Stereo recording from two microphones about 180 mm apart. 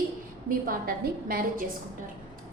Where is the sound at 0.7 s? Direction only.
55° right (ahead or behind).